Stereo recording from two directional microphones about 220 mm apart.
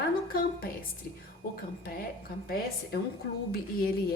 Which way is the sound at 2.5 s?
40° left (ahead or behind).